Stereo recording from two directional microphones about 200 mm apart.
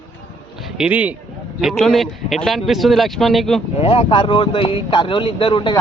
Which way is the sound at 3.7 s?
30° left (ahead or behind).